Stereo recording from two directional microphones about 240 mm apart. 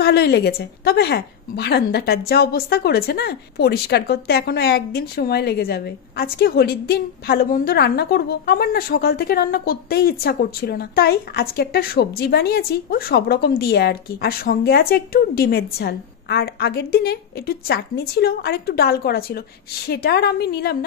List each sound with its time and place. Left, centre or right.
0.0 s a woman's voice: left